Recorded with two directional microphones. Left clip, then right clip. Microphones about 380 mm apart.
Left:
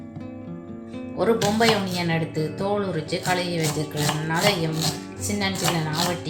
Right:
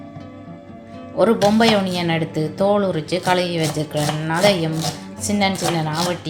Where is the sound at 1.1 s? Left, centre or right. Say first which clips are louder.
Right 6 dB; right.